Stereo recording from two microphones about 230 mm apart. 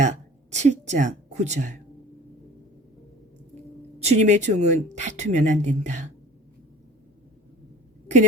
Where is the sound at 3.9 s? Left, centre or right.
Right.